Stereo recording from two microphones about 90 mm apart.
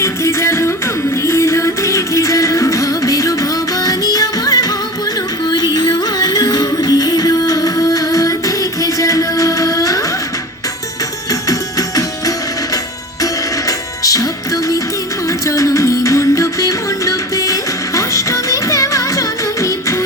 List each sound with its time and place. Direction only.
0.0 s music: 30° left (ahead or behind)
5.7 s music: 50° left (ahead or behind)
11.3 s music: 40° left (ahead or behind)